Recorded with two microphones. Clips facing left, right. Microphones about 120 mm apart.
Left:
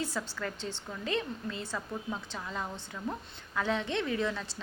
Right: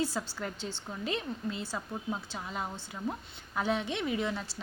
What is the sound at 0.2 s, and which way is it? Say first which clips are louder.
A woman's voice: even; 20° right (ahead or behind).